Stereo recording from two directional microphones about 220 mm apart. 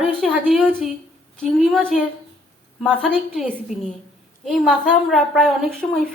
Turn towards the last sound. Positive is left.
turn(degrees=0)  # may be behind; listen again after turning